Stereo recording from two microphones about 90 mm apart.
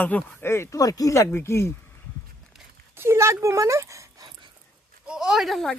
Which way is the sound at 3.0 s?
30° right (ahead or behind).